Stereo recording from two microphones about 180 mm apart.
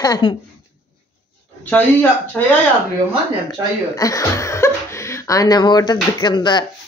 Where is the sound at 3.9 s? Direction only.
20° left (ahead or behind).